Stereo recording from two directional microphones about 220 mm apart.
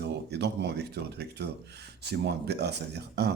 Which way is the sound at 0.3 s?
50° right (ahead or behind).